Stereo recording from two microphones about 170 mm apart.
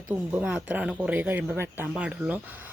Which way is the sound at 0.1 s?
10° right (ahead or behind).